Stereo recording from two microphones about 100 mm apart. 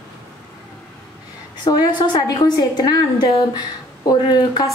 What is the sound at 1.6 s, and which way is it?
A woman's voice, 45° left (ahead or behind).